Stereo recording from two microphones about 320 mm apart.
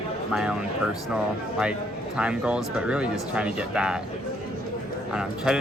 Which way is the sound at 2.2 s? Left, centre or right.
Centre.